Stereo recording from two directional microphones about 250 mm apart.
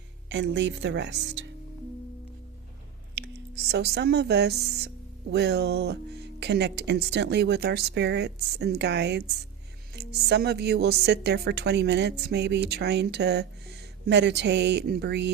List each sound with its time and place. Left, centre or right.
0.3 s speech: right
3.2 s speech: right